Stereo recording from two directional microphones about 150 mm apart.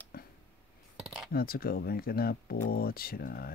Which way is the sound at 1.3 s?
85° left.